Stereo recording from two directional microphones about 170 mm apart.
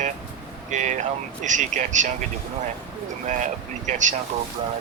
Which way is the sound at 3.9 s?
45° right (ahead or behind).